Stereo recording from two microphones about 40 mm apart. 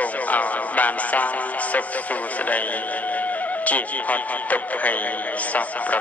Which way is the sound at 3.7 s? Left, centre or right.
Left.